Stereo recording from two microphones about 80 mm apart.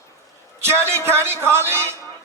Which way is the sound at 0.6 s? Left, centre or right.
Right.